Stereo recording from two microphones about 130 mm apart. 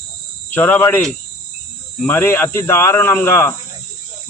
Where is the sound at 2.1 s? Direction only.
20° left (ahead or behind).